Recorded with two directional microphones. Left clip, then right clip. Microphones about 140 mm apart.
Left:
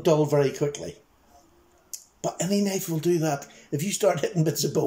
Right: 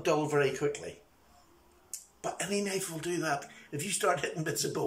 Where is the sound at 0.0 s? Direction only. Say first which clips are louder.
Left 7 dB; 30° left (ahead or behind).